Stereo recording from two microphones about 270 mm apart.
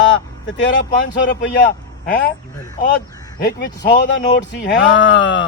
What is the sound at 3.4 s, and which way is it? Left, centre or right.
Speech, left.